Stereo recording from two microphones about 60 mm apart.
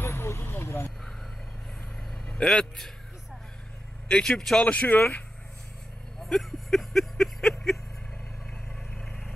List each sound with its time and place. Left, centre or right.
0.0 s vehicle: left
2.2 s vehicle: centre
4.1 s speech: centre
4.7 s speech: left
6.1 s a sound: centre
8.9 s vehicle: centre